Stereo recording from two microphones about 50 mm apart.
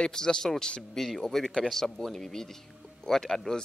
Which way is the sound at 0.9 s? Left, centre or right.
Centre.